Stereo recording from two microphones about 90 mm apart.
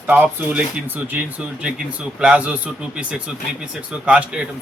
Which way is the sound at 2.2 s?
15° right (ahead or behind).